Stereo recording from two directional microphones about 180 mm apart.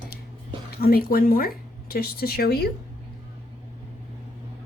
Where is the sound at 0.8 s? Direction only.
55° left (ahead or behind).